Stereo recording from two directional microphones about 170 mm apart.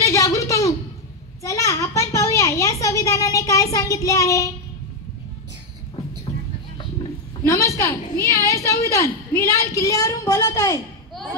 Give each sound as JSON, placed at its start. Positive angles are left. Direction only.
{"t": 0.0, "sound": "a sound", "side_deg": 20}
{"t": 1.4, "sound": "a child's voice", "side_deg": 20}
{"t": 7.4, "sound": "a woman's voice", "side_deg": 15}